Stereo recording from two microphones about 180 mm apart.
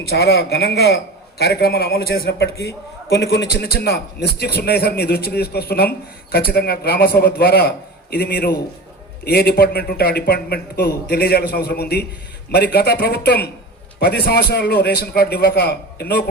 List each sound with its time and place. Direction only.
0.1 s a man's voice: 65° left (ahead or behind)